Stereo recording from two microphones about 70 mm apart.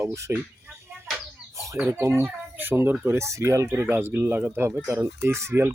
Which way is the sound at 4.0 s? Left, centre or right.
Right.